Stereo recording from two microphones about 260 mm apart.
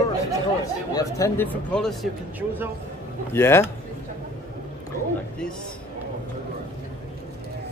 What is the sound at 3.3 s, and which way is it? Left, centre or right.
Speech, centre.